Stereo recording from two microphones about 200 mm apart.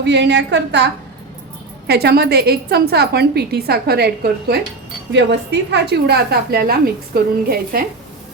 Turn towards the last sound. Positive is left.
turn(degrees=-50)  # may be behind; listen again after turning